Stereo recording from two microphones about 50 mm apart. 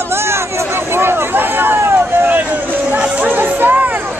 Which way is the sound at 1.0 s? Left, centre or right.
Right.